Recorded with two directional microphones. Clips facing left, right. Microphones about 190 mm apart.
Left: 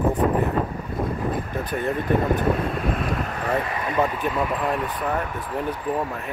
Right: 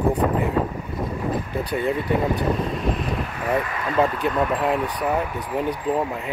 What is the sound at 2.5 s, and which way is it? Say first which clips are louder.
Vehicle: even; 55° left (ahead or behind).